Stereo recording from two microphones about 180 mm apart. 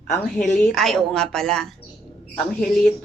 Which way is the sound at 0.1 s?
40° left (ahead or behind).